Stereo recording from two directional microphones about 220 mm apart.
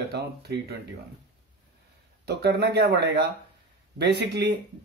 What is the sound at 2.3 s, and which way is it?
Speech, 50° right (ahead or behind).